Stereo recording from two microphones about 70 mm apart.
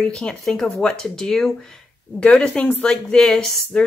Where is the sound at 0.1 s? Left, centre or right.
Centre.